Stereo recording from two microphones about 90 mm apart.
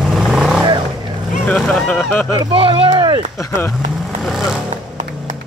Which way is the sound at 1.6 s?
10° left (ahead or behind).